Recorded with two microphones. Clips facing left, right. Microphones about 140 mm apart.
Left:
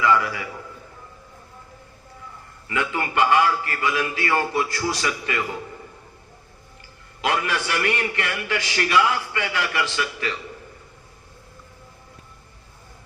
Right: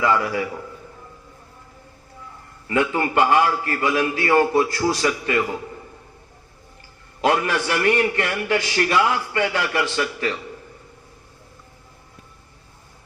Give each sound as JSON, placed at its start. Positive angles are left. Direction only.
{"t": 0.0, "sound": "a man's voice", "side_deg": -35}
{"t": 2.6, "sound": "a man's voice", "side_deg": -40}
{"t": 7.2, "sound": "a man's voice", "side_deg": -40}